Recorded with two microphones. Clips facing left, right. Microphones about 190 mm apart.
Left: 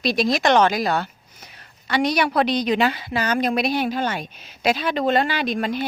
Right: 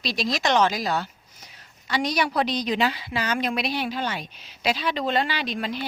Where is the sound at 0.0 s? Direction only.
55° left (ahead or behind).